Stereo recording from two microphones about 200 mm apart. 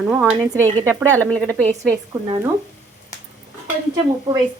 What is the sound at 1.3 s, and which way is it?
Speech, 5° left (ahead or behind).